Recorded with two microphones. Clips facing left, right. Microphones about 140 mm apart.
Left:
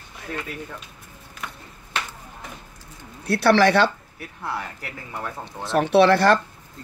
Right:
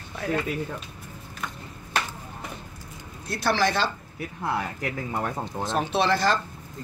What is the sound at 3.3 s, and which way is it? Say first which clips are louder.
Speech: left 7 dB; 65° left (ahead or behind).